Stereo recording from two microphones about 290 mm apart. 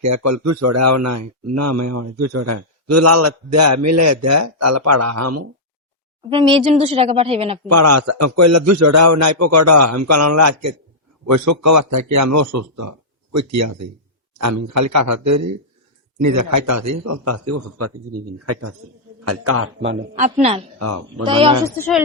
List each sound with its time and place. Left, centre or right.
0.0 s speech: right
6.3 s speech: centre
7.7 s speech: right
11.3 s a man's voice: right
19.2 s a man's voice: right
20.1 s speech: right
20.7 s speech: right
21.2 s speech: centre
21.8 s speech: centre